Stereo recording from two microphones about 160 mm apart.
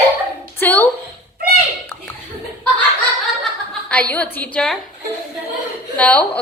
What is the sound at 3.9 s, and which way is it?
Speech, 10° left (ahead or behind).